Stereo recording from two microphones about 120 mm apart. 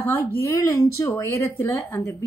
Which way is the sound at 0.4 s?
25° left (ahead or behind).